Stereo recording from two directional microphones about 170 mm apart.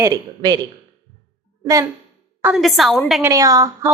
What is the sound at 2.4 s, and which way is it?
Speech, 5° right (ahead or behind).